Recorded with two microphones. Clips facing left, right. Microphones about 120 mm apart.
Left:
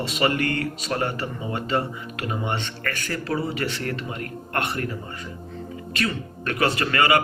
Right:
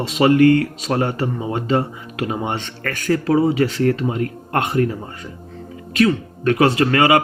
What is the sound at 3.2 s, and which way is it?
Speech, 90° right.